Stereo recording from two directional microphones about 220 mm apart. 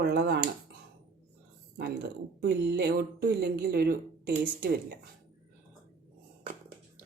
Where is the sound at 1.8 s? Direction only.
45° right (ahead or behind).